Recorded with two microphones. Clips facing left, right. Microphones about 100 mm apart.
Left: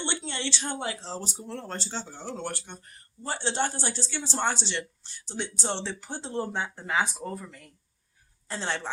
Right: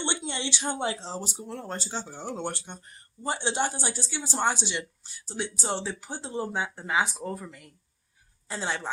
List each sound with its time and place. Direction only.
0.0 s a sound: 15° right (ahead or behind)
0.9 s a woman's voice: 20° right (ahead or behind)
1.2 s a woman's voice: 5° right (ahead or behind)